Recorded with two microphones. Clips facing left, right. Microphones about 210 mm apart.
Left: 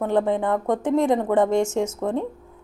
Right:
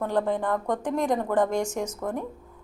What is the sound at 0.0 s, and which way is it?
Speech, 20° left (ahead or behind).